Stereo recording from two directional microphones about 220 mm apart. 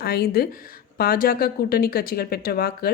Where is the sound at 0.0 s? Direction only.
45° left (ahead or behind).